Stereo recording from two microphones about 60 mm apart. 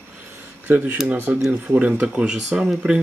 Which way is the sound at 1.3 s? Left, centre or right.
Centre.